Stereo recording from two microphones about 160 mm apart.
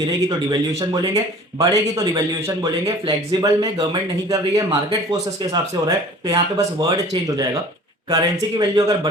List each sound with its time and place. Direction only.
0.3 s speech: 20° right (ahead or behind)